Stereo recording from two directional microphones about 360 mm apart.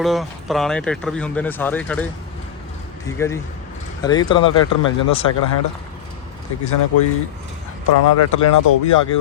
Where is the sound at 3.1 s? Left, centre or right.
Centre.